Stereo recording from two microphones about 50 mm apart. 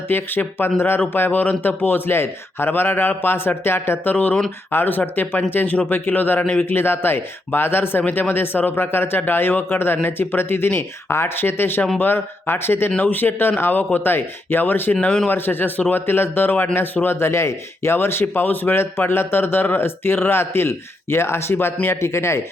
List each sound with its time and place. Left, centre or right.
0.1 s a man's voice: left
8.0 s a man's voice: left
13.0 s a man's voice: left
17.2 s speech: left
18.8 s speech: left